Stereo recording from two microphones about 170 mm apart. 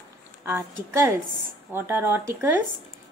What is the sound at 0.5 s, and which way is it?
Speech, 15° right (ahead or behind).